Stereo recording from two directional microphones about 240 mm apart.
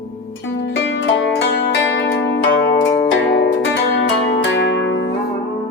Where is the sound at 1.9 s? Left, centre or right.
Left.